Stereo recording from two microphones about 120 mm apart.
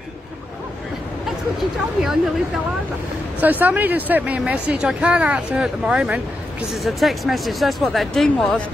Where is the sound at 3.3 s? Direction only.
15° right (ahead or behind).